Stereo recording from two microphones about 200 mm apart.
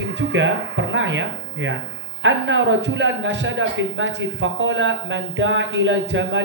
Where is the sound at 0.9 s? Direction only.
65° right (ahead or behind).